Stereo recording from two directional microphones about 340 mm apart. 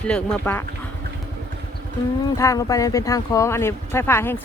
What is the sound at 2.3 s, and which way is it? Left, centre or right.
Speech, centre.